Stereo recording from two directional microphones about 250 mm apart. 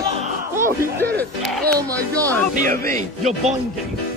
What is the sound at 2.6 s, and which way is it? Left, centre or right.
Speech, right.